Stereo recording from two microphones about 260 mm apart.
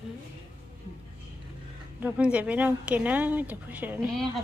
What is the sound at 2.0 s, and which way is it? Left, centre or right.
A woman's voice, centre.